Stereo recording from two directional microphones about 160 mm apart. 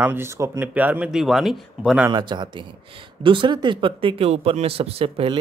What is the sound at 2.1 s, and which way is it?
Speech, 30° right (ahead or behind).